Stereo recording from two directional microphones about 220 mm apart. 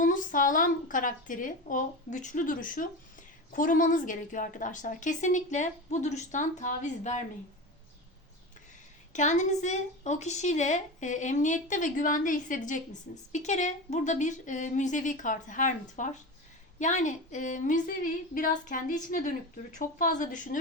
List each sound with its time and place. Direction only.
0.0 s a woman's voice: 35° left (ahead or behind)
9.1 s a woman's voice: 35° left (ahead or behind)